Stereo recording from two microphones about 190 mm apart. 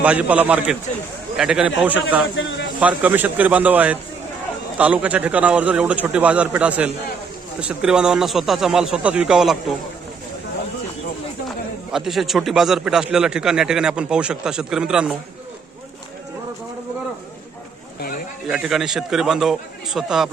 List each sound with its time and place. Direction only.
0.0 s a man's voice: 5° right (ahead or behind)
2.3 s speech: 75° left (ahead or behind)
2.8 s a man's voice: 10° right (ahead or behind)
11.9 s a man's voice: centre (ahead or behind)
18.4 s a man's voice: 5° right (ahead or behind)